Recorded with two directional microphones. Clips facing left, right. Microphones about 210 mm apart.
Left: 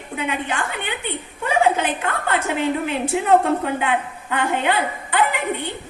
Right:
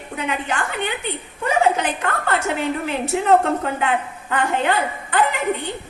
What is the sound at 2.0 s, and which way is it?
Speech, 45° right (ahead or behind).